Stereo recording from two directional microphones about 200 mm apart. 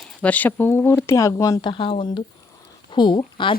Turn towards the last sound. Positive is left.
turn(degrees=25)  # may be behind; listen again after turning